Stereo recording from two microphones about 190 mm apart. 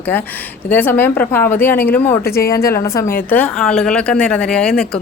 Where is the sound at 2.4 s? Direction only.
50° left (ahead or behind).